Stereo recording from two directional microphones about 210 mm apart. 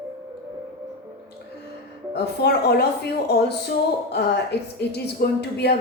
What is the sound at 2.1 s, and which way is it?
Speech, 50° left (ahead or behind).